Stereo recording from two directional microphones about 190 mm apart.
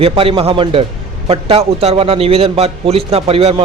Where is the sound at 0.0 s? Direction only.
30° right (ahead or behind).